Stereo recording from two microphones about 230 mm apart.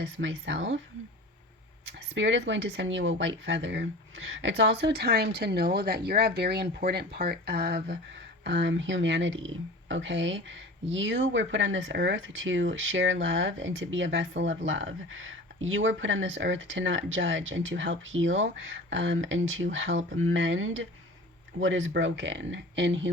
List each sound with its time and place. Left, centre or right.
0.0 s a woman's voice: right
2.1 s a woman's voice: right